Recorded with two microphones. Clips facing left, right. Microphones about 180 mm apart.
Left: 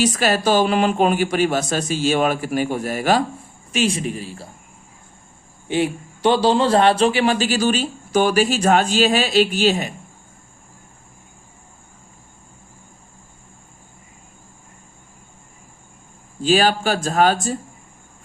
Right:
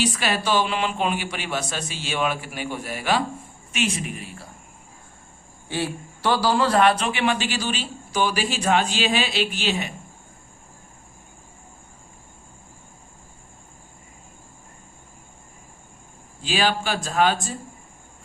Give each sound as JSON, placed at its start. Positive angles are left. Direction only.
{"t": 0.0, "sound": "a man's voice", "side_deg": 45}
{"t": 5.6, "sound": "a man's voice", "side_deg": 20}
{"t": 16.4, "sound": "speech", "side_deg": 45}